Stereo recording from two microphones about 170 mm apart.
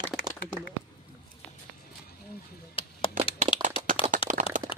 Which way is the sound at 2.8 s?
30° left (ahead or behind).